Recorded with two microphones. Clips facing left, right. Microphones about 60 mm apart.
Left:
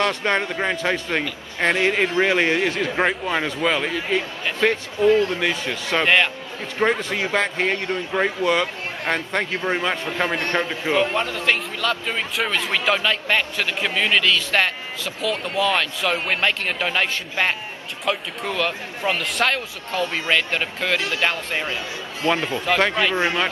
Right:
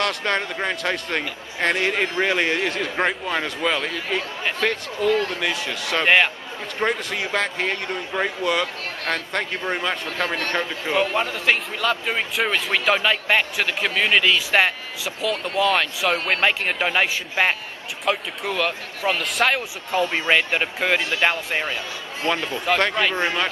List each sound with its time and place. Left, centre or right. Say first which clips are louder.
0.0 s speech: left 2 dB; centre
5.0 s speech: left 4 dB; left
5.7 s speech: left 2 dB; centre
6.0 s a man's voice: right 1 dB; centre
6.8 s speech: left 3 dB; centre
11.1 s a man's voice: even; centre
22.2 s a man's voice: left 2 dB; centre